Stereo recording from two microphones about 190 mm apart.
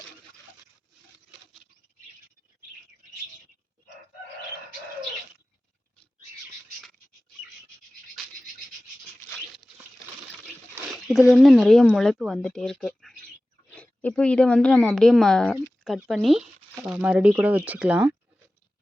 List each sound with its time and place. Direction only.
10.9 s speech: 5° right (ahead or behind)